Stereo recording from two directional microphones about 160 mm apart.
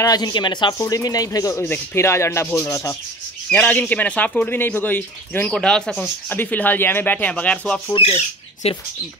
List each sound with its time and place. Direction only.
0.0 s speech: 25° left (ahead or behind); by 7.8 s 5° left (ahead or behind)
7.9 s speech: 40° left (ahead or behind)